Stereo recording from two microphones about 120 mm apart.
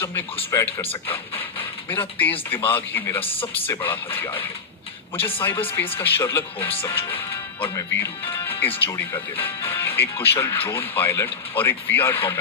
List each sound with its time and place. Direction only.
0.0 s a man's voice: 20° left (ahead or behind)
0.9 s speech: 50° left (ahead or behind)
1.9 s a man's voice: 15° left (ahead or behind)
5.4 s a man's voice: 15° left (ahead or behind)
6.6 s speech: 50° left (ahead or behind)
6.8 s a man's voice: 25° left (ahead or behind)